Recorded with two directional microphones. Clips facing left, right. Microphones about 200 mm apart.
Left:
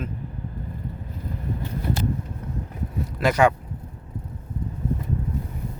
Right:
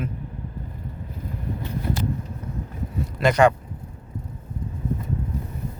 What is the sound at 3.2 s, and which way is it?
Speech, 5° left (ahead or behind).